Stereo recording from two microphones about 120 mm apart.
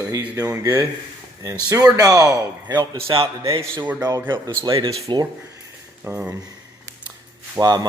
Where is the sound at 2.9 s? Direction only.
50° right (ahead or behind).